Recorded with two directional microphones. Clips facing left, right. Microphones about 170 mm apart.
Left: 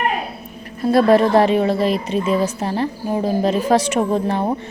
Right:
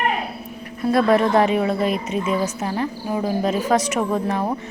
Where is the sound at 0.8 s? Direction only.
30° left (ahead or behind).